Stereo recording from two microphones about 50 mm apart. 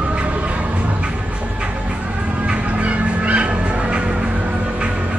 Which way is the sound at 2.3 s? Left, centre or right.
Right.